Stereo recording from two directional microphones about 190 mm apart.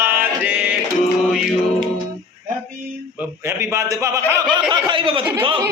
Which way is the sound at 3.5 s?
15° right (ahead or behind).